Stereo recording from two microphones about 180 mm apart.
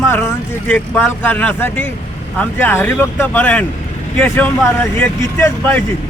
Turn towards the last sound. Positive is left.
turn(degrees=10)  # may be behind; listen again after turning